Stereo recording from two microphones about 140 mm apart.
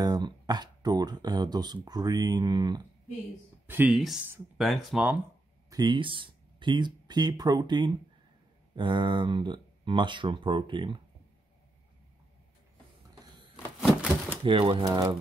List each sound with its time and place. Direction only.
0.0 s speech: 30° right (ahead or behind)
3.6 s speech: 10° right (ahead or behind)
5.7 s speech: 30° right (ahead or behind)
13.7 s a sound: 5° right (ahead or behind)
14.4 s speech: 35° right (ahead or behind)